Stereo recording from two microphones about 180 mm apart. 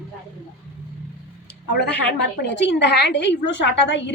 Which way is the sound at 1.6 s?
70° left (ahead or behind).